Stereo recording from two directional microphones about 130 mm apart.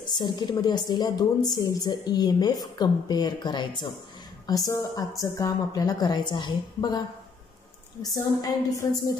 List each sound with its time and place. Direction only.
0.0 s a woman's voice: 35° left (ahead or behind)
8.0 s a woman's voice: 30° left (ahead or behind)